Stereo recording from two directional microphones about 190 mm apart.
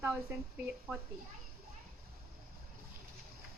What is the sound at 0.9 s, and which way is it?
Speech, centre (ahead or behind).